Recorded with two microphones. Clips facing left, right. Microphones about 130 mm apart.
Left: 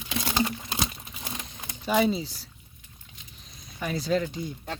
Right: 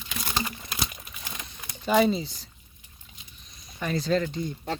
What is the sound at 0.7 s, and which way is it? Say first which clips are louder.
Crumpling: left 3 dB; 25° left (ahead or behind).